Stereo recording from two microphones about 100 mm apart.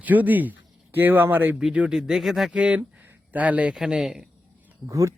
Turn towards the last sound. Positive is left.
turn(degrees=-30)  # may be behind; listen again after turning